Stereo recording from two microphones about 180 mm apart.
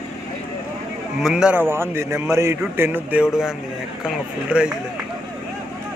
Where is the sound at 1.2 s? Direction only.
5° right (ahead or behind).